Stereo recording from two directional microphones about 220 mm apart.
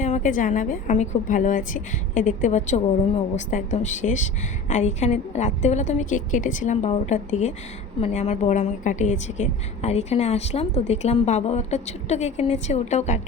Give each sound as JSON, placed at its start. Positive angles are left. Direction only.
{"t": 0.0, "sound": "a woman's voice", "side_deg": 35}